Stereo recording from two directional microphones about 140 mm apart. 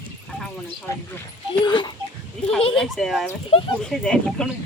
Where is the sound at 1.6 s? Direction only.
35° left (ahead or behind).